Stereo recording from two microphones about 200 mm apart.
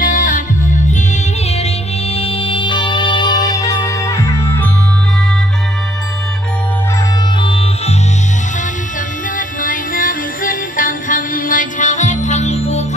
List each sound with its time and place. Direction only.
0.0 s music: 40° left (ahead or behind); by 4.6 s 15° left (ahead or behind)
7.4 s music: 25° left (ahead or behind)
9.6 s music: 40° left (ahead or behind)